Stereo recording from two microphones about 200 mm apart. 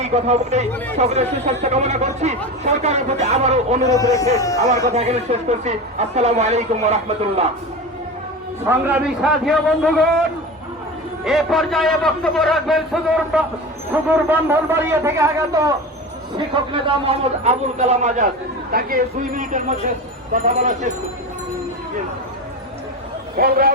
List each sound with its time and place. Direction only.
0.0 s speech: 35° right (ahead or behind)
3.8 s speech: 15° left (ahead or behind)
4.9 s speech: 35° right (ahead or behind)
8.6 s a man's voice: 10° right (ahead or behind)
11.3 s a man's voice: centre (ahead or behind); by 15.7 s 15° right (ahead or behind)
16.7 s speech: 25° right (ahead or behind)
18.7 s speech: 45° right (ahead or behind)
23.4 s speech: 50° right (ahead or behind)